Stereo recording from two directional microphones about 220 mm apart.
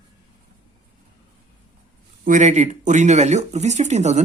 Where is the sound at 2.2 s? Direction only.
35° right (ahead or behind).